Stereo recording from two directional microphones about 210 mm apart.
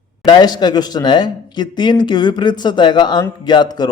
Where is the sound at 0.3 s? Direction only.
20° left (ahead or behind).